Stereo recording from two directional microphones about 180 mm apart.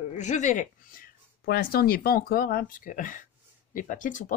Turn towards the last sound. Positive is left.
turn(degrees=45)  # may be behind; listen again after turning